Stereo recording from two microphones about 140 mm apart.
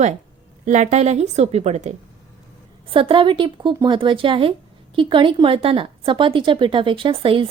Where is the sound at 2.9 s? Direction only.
40° right (ahead or behind).